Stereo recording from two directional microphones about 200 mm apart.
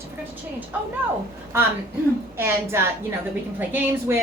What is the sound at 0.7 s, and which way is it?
Speech, 5° right (ahead or behind).